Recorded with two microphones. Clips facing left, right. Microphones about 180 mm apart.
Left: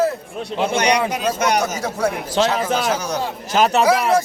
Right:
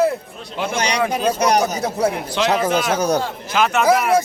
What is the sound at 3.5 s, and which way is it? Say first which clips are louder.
Speech: left 1 dB; 40° left (ahead or behind).